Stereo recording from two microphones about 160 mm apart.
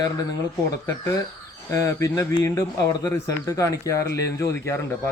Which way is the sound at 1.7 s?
20° left (ahead or behind).